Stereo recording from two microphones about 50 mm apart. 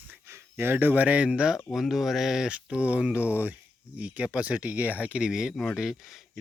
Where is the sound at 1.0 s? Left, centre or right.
Right.